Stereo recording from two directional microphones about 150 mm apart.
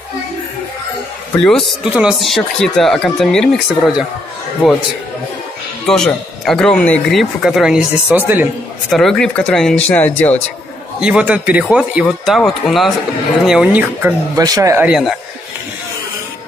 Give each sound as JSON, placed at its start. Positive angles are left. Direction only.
{"t": 1.4, "sound": "speech", "side_deg": 5}
{"t": 5.9, "sound": "speech", "side_deg": 5}
{"t": 11.0, "sound": "a man's voice", "side_deg": -5}
{"t": 14.3, "sound": "speech", "side_deg": -25}
{"t": 14.9, "sound": "speech", "side_deg": 0}